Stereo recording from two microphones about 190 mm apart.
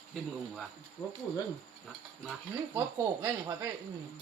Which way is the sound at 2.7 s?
10° right (ahead or behind).